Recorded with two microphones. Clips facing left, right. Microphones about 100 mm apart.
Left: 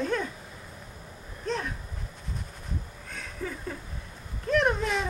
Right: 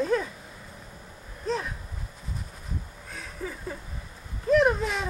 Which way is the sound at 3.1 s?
5° right (ahead or behind).